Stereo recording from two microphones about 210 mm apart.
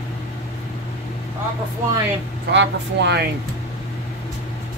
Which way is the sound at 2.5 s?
55° right (ahead or behind).